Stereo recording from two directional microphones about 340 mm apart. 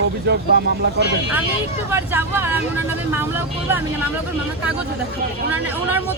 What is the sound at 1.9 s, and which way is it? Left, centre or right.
Speech, centre.